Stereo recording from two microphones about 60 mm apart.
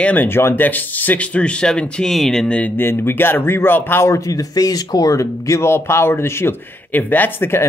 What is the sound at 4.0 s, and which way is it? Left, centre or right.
Speech, left.